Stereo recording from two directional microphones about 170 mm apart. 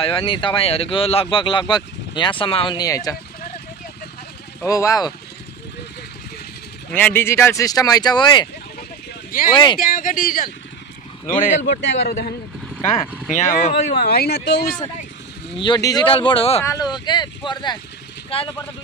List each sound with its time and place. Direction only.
0.0 s speech: 30° left (ahead or behind)
4.6 s speech: 20° left (ahead or behind)
6.9 s speech: 10° left (ahead or behind); by 8.5 s 25° left (ahead or behind)
9.5 s speech: 25° left (ahead or behind)
9.8 s speech: 55° left (ahead or behind)
11.8 s speech: 80° left
13.3 s speech: 45° left (ahead or behind)
13.9 s speech: 65° left (ahead or behind)
15.5 s speech: 30° left (ahead or behind)
16.6 s speech: 25° left (ahead or behind)